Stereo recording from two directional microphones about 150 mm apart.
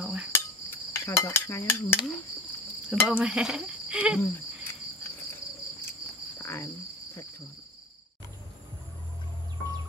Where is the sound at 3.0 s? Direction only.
5° right (ahead or behind).